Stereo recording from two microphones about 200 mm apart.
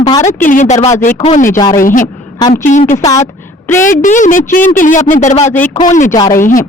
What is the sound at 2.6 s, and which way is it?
A woman's voice, 40° left (ahead or behind).